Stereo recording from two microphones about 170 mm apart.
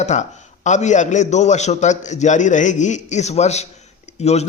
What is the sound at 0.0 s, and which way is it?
A man's voice, 45° left (ahead or behind).